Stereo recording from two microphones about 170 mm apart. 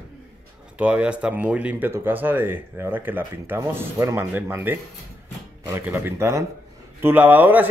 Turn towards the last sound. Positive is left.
turn(degrees=-10)  # may be behind; listen again after turning